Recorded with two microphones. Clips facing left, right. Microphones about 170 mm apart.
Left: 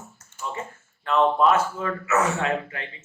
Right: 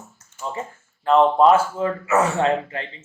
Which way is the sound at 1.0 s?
30° right (ahead or behind).